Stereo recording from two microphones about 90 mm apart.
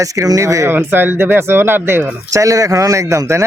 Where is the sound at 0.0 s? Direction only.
40° right (ahead or behind).